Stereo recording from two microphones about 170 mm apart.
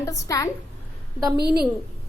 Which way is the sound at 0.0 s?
20° left (ahead or behind).